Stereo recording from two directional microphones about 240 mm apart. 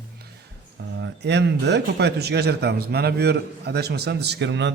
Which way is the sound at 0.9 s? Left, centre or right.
Right.